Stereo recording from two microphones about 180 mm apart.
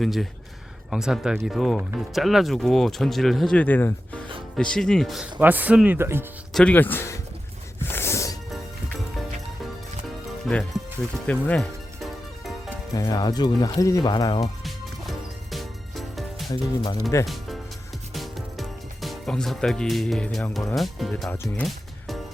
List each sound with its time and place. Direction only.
0.0 s speech: centre (ahead or behind)
6.5 s speech: 5° left (ahead or behind)
7.8 s music: 15° left (ahead or behind)
8.4 s music: centre (ahead or behind)
10.5 s speech: centre (ahead or behind)
11.3 s music: 5° left (ahead or behind)
12.9 s speech: 20° left (ahead or behind)
14.4 s music: centre (ahead or behind)
16.5 s speech: 20° left (ahead or behind)
17.2 s music: centre (ahead or behind)
20.7 s speech: centre (ahead or behind)
21.3 s music: 10° left (ahead or behind)